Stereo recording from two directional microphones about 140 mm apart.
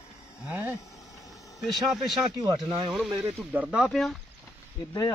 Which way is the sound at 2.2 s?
30° right (ahead or behind).